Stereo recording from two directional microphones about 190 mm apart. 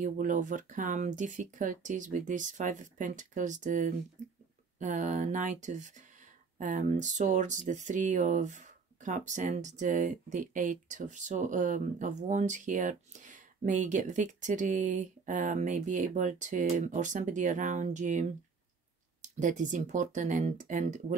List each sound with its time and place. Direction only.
0.0 s speech: 40° right (ahead or behind)